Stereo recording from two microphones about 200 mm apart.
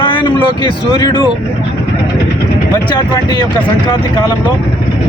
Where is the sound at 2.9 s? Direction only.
20° left (ahead or behind).